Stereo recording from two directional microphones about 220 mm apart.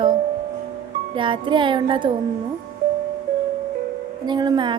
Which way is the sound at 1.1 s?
20° right (ahead or behind).